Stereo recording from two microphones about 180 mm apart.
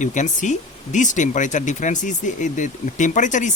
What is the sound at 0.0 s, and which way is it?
Speech, 45° left (ahead or behind).